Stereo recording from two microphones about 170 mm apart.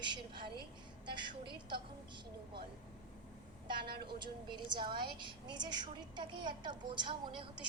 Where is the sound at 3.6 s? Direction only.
30° right (ahead or behind).